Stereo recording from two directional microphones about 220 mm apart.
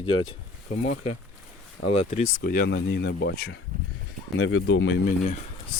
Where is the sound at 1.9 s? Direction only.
30° left (ahead or behind).